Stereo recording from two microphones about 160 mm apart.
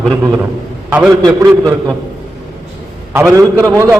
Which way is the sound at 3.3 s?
20° right (ahead or behind).